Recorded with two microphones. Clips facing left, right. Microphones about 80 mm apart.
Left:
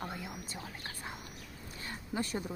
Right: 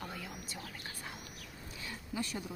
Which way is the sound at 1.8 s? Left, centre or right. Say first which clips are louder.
Left 3 dB; left.